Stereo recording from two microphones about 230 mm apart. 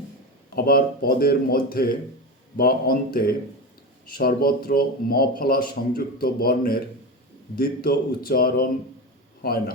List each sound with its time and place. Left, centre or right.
0.5 s a man's voice: left